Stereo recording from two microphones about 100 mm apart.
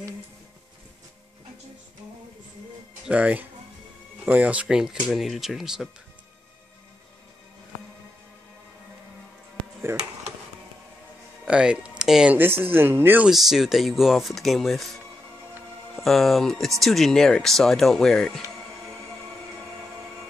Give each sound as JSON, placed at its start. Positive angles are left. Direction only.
{"t": 3.1, "sound": "speech", "side_deg": -15}
{"t": 9.9, "sound": "speech", "side_deg": -30}
{"t": 11.4, "sound": "speech", "side_deg": -10}
{"t": 12.4, "sound": "speech", "side_deg": -20}
{"t": 13.3, "sound": "speech", "side_deg": 0}
{"t": 16.0, "sound": "speech", "side_deg": 0}